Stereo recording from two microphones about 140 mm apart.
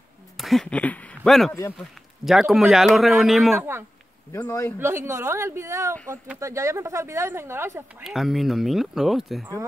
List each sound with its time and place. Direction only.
0.4 s a man's voice: centre (ahead or behind)
4.3 s speech: 20° left (ahead or behind)
4.7 s speech: 20° right (ahead or behind)
8.0 s a man's voice: centre (ahead or behind)